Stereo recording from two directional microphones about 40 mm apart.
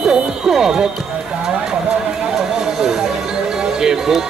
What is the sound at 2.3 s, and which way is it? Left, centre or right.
Music, centre.